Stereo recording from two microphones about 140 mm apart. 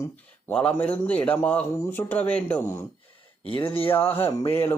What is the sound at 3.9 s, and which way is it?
Speech, 15° left (ahead or behind).